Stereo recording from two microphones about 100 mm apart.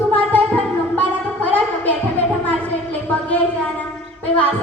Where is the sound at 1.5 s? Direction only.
20° left (ahead or behind).